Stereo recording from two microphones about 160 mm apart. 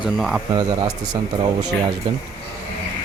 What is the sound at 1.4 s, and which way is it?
Speech, 25° right (ahead or behind).